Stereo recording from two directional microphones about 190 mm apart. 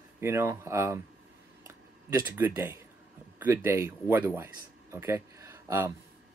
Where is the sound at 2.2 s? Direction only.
10° right (ahead or behind).